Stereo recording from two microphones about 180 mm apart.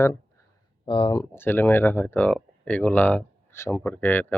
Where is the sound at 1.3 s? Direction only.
10° left (ahead or behind).